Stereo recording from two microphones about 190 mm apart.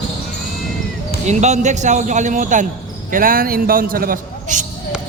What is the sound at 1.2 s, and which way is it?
A man's voice, 35° right (ahead or behind).